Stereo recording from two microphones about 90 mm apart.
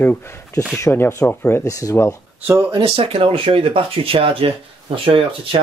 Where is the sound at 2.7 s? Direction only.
80° right.